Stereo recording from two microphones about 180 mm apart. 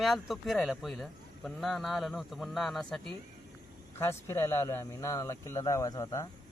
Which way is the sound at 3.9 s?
15° left (ahead or behind).